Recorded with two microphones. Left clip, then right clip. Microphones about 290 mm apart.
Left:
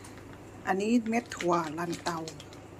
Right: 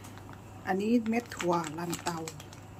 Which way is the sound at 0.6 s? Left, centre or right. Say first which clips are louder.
Left 1 dB; centre.